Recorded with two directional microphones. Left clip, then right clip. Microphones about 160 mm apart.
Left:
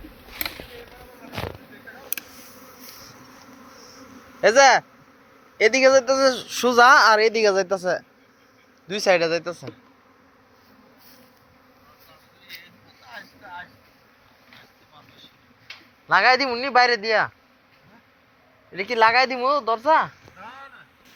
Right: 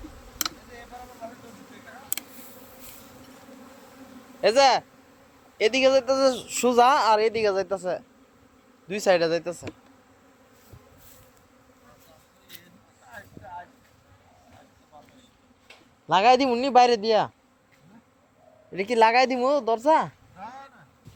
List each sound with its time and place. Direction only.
4.4 s speech: 5° right (ahead or behind)
8.9 s speech: 15° right (ahead or behind)
13.1 s vehicle: 60° right (ahead or behind)
15.7 s a sound: 80° right
16.0 s speech: 40° right (ahead or behind)
18.7 s speech: 35° right (ahead or behind)